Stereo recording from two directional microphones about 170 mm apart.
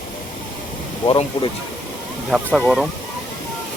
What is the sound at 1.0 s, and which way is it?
Speech, 30° left (ahead or behind).